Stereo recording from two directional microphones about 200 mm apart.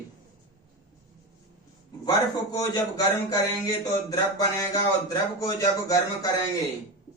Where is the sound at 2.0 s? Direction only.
20° left (ahead or behind).